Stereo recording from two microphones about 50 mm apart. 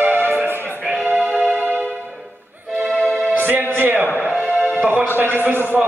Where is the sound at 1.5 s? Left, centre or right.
Right.